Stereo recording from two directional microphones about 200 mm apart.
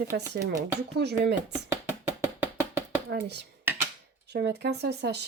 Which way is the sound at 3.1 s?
60° right (ahead or behind).